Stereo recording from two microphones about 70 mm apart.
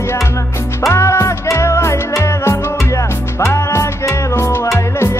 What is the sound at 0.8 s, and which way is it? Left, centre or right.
Music, left.